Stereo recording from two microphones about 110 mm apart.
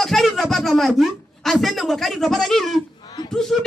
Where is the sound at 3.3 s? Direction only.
5° left (ahead or behind).